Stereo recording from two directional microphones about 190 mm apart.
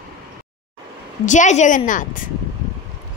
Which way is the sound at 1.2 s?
40° left (ahead or behind).